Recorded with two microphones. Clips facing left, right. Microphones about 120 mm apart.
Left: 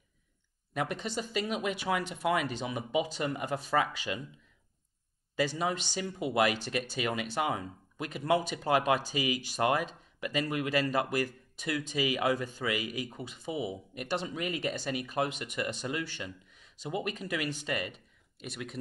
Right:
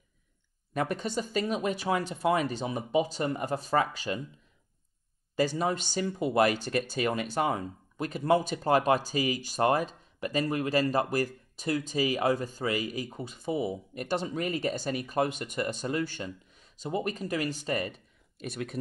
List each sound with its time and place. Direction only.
0.7 s speech: 45° right (ahead or behind)
5.3 s speech: 45° right (ahead or behind)